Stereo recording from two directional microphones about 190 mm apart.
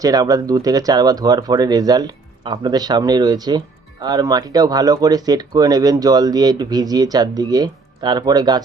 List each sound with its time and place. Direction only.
0.0 s speech: 20° right (ahead or behind)